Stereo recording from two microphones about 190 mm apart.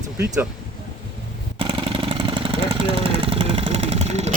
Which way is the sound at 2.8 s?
30° right (ahead or behind).